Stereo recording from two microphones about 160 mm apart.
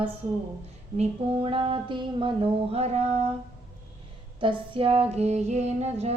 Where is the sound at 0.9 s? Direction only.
35° right (ahead or behind).